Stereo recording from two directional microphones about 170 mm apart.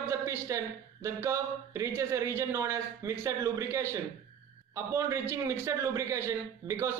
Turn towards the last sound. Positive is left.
turn(degrees=-15)  # may be behind; listen again after turning